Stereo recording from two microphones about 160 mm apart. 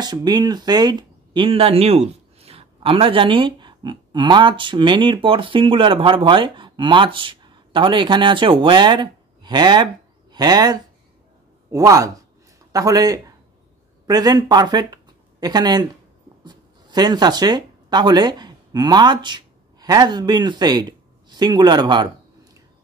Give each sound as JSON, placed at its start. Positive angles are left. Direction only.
{"t": 0.0, "sound": "speech", "side_deg": -25}